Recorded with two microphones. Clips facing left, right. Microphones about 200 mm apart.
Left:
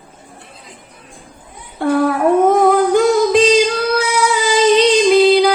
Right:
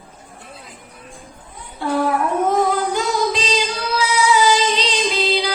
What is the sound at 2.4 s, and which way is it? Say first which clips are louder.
Female singing: left 6 dB; 55° left (ahead or behind).